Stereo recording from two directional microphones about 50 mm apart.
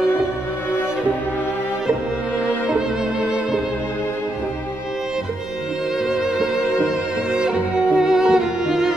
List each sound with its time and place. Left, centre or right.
2.6 s music: right
6.0 s music: centre